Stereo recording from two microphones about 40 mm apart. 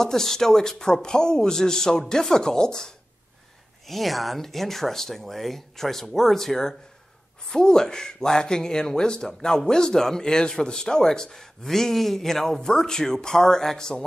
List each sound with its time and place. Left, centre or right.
0.0 s speech: centre
3.8 s speech: centre